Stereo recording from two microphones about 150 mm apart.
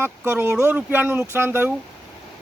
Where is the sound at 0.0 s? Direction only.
15° right (ahead or behind).